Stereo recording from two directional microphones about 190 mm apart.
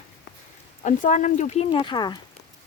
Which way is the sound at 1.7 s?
25° left (ahead or behind).